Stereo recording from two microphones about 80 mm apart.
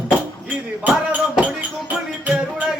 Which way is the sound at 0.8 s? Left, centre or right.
Centre.